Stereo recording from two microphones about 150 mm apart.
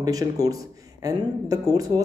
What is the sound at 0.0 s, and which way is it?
Speech, 25° right (ahead or behind).